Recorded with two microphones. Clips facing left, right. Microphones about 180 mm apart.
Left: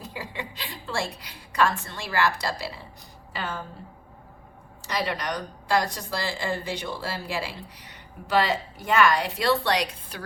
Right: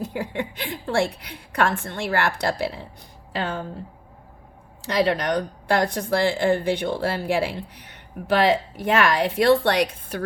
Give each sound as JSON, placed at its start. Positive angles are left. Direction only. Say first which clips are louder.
{"t": 0.0, "sound": "a woman's voice", "louder": "right 8 dB", "side_deg": -55}
{"t": 4.9, "sound": "a woman's voice", "louder": "right 7 dB", "side_deg": -65}